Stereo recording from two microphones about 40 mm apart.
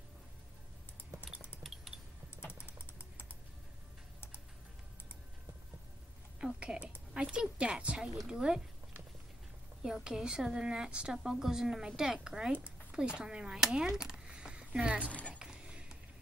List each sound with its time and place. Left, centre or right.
3.0 s typing: left
6.4 s a sound: right
7.2 s speech: right
8.0 s a woman's voice: centre
9.8 s a woman's voice: centre
12.9 s speech: right
14.3 s a sound: right
15.0 s speech: left
15.4 s a sound: right